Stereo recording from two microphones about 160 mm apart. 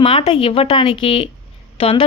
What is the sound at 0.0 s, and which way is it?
Speech, 35° left (ahead or behind).